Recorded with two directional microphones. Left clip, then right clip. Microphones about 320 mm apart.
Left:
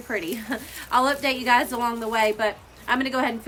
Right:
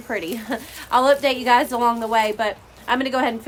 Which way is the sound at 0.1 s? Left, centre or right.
Centre.